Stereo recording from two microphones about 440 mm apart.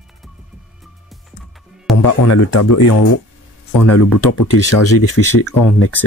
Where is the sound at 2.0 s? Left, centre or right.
Left.